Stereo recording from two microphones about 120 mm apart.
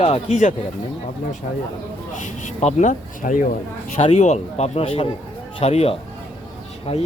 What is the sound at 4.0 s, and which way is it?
Speech, 65° left (ahead or behind).